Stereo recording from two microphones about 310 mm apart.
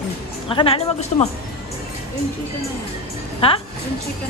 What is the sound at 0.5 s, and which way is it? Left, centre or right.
Speech, centre.